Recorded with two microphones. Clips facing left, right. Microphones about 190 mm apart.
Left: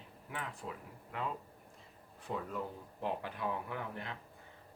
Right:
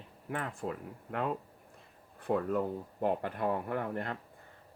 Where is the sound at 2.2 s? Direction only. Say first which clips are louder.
Right 9 dB; 55° right (ahead or behind).